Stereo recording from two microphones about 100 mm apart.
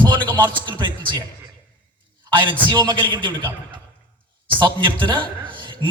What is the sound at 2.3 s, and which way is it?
A man's voice, 55° right (ahead or behind).